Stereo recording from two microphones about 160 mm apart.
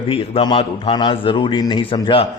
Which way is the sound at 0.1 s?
30° left (ahead or behind).